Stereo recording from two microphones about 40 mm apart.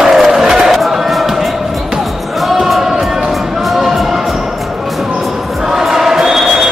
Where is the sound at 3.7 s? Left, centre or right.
Centre.